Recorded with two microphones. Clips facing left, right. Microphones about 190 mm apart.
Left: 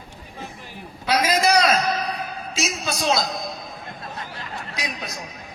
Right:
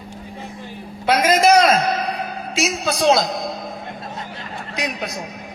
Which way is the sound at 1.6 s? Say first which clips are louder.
Right 4 dB; 55° right (ahead or behind).